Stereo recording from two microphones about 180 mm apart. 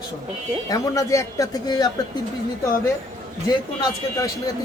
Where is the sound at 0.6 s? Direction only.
20° left (ahead or behind).